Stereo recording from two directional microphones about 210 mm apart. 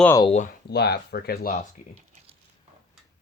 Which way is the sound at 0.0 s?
10° left (ahead or behind).